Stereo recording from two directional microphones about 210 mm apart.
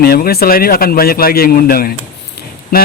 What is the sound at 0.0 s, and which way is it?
Speech, 45° left (ahead or behind).